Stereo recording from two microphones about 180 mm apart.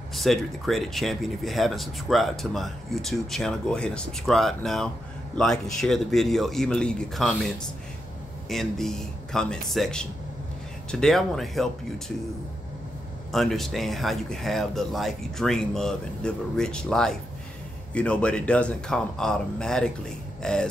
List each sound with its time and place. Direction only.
0.1 s speech: centre (ahead or behind)
8.5 s speech: centre (ahead or behind)
13.3 s speech: centre (ahead or behind)